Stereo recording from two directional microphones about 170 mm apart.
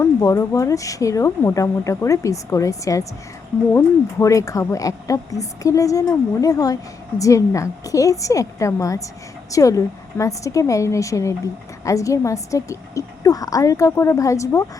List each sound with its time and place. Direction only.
0.0 s a woman's voice: 20° left (ahead or behind)